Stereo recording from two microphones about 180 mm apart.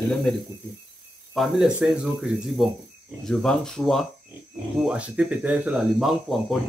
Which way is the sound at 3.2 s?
5° left (ahead or behind).